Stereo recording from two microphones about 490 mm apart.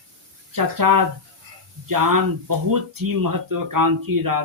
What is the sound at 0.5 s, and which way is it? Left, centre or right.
Speech, right.